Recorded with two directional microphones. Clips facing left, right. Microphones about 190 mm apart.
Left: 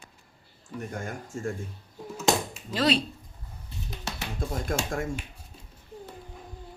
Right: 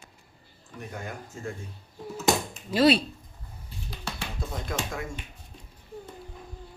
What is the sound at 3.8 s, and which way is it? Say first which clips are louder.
Music: even; 20° left (ahead or behind).